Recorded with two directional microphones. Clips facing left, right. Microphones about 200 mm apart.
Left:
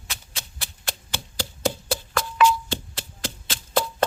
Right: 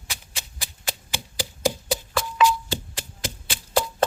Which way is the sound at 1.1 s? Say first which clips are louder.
Left 1 dB; 15° right (ahead or behind).